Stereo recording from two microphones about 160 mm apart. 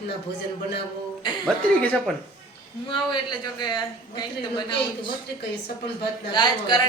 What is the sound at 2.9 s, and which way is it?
A woman's voice, 30° left (ahead or behind).